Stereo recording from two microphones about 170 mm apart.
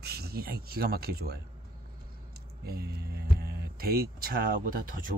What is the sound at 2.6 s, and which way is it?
Speech, 70° right (ahead or behind).